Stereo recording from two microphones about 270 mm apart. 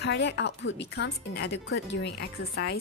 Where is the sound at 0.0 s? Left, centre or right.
Left.